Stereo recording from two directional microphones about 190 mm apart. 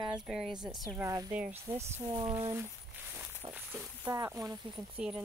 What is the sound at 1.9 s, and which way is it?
Speech, 30° right (ahead or behind).